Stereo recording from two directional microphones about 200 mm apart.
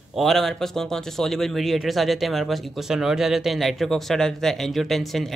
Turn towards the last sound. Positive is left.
turn(degrees=0)  # may be behind; listen again after turning